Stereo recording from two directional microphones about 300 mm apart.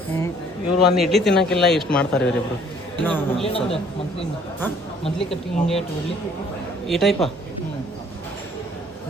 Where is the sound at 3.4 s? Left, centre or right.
Centre.